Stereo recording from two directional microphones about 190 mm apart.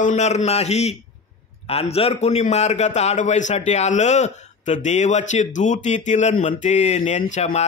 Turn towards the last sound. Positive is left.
turn(degrees=35)  # may be behind; listen again after turning